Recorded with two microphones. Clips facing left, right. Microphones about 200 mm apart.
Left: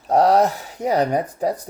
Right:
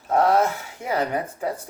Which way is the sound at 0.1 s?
40° left (ahead or behind).